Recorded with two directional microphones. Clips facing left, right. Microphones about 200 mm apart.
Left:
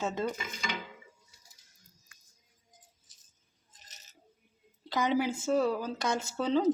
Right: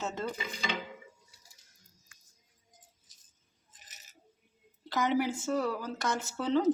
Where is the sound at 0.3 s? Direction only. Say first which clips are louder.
Right 2 dB; 30° right (ahead or behind).